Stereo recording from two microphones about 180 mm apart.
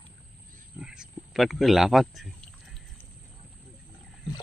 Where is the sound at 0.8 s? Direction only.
5° right (ahead or behind).